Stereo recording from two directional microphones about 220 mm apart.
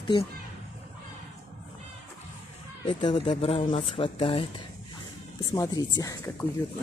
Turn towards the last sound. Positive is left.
turn(degrees=15)  # may be behind; listen again after turning